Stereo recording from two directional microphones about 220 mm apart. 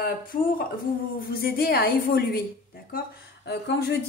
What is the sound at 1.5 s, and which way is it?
Speech, 45° left (ahead or behind).